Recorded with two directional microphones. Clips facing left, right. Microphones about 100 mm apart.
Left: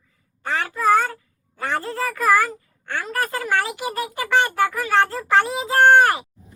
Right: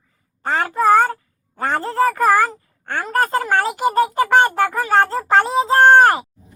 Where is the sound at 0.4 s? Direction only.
40° right (ahead or behind).